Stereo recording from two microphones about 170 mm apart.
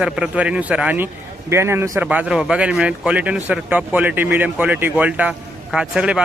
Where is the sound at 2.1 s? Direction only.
5° right (ahead or behind).